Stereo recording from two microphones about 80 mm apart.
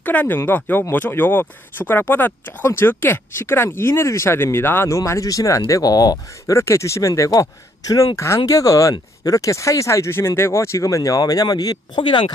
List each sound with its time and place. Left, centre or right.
0.0 s speech: left
6.6 s speech: left